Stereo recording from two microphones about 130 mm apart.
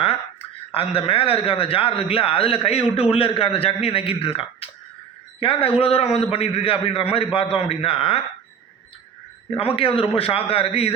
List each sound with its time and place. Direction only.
0.7 s a man's voice: 45° left (ahead or behind)
9.6 s a man's voice: 45° left (ahead or behind)